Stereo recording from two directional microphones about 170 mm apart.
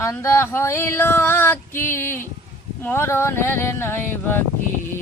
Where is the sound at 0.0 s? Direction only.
15° left (ahead or behind).